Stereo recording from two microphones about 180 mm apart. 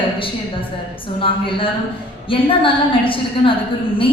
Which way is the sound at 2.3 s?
30° left (ahead or behind).